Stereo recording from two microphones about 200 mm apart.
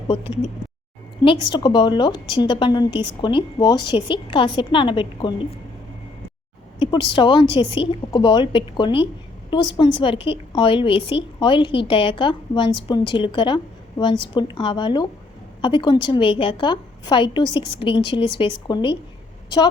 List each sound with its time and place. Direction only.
1.2 s a woman's voice: 25° left (ahead or behind)
6.7 s a woman's voice: 25° left (ahead or behind)